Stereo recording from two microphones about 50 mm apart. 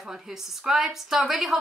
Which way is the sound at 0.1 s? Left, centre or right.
Centre.